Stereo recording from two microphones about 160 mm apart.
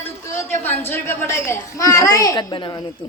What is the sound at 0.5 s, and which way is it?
A woman's voice, 15° left (ahead or behind).